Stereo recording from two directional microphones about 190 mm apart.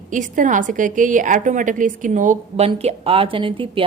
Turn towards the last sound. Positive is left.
turn(degrees=-25)  # may be behind; listen again after turning